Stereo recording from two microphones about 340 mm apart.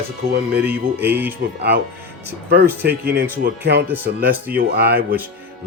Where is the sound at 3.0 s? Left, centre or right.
Right.